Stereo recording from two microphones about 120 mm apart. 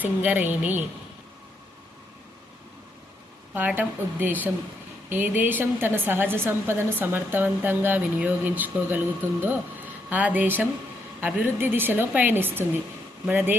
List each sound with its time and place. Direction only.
0.0 s a woman's voice: 15° right (ahead or behind)
3.8 s a woman's voice: 15° right (ahead or behind)